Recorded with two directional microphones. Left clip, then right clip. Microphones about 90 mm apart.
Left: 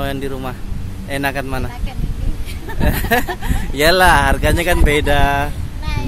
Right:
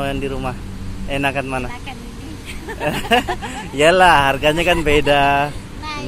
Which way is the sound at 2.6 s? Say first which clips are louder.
Right 1 dB; 25° left (ahead or behind).